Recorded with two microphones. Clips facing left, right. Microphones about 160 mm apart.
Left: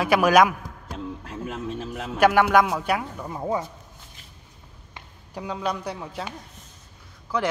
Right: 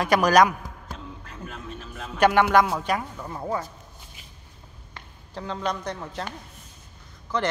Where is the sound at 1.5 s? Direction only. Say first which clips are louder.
Left 9 dB; 85° left.